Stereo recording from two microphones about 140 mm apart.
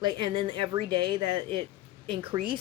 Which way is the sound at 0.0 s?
35° right (ahead or behind).